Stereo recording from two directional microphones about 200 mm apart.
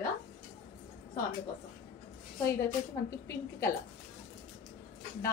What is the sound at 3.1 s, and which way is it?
Speech, 15° left (ahead or behind).